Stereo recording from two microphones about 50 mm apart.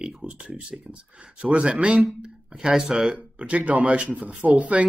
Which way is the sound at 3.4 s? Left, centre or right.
Right.